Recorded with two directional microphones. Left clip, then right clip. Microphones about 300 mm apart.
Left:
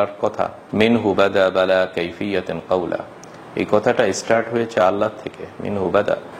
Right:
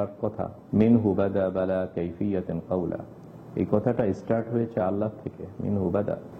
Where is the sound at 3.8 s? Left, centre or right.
Centre.